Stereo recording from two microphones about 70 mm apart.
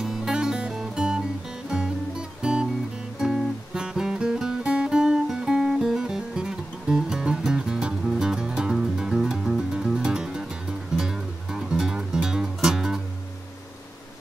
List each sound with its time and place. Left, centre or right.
0.0 s music: centre